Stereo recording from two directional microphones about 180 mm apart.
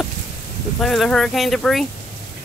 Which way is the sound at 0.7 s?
Centre (ahead or behind).